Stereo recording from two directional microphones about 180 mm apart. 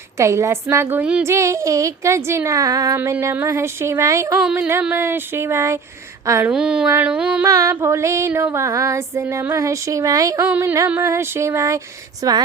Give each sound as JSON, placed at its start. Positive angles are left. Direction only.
{"t": 0.2, "sound": "female singing", "side_deg": -15}
{"t": 6.5, "sound": "a woman's voice", "side_deg": -5}
{"t": 6.9, "sound": "female singing", "side_deg": -5}
{"t": 7.4, "sound": "female singing", "side_deg": -15}
{"t": 12.2, "sound": "a woman's voice", "side_deg": -20}